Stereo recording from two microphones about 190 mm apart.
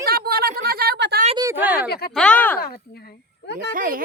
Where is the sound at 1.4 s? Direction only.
15° right (ahead or behind).